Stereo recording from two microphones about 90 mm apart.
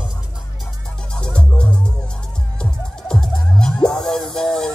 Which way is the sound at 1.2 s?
10° left (ahead or behind).